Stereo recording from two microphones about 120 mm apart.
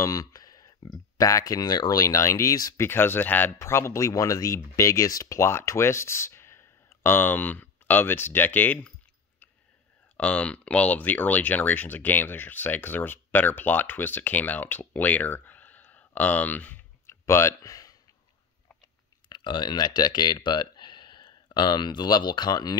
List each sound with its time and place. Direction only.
0.0 s speech: 30° left (ahead or behind)
2.9 s speech: 20° left (ahead or behind)
10.1 s speech: 10° left (ahead or behind); by 17.9 s 30° left (ahead or behind)
19.2 s speech: 40° left (ahead or behind)